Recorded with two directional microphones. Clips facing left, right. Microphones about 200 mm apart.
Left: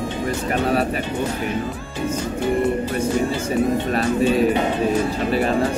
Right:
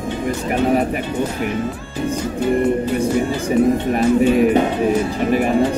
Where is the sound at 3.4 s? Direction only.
15° right (ahead or behind).